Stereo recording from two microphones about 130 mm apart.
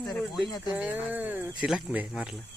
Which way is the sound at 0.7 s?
15° right (ahead or behind).